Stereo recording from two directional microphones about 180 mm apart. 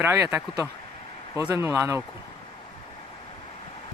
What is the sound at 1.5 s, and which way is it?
Speech, 15° right (ahead or behind).